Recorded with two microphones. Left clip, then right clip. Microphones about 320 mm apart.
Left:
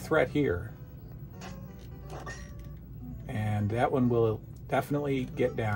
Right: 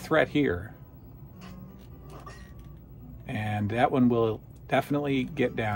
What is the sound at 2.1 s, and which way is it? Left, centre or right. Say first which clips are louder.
Music: left 4 dB; centre.